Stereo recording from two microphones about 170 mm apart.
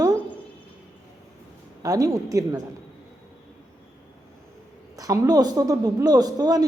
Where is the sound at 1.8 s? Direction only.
20° right (ahead or behind).